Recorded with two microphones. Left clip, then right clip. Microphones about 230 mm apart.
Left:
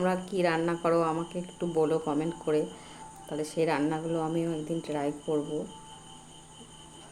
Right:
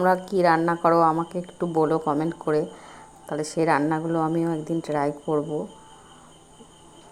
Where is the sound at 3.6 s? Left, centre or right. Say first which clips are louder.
Right 7 dB; right.